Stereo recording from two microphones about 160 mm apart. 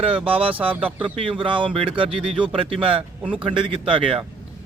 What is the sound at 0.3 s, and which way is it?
Speech, 35° right (ahead or behind).